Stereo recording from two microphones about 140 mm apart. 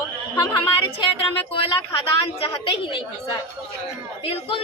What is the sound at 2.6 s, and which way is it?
Speech, 40° left (ahead or behind).